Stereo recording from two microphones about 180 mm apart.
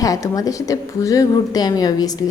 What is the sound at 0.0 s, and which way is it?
A woman's voice, 20° left (ahead or behind).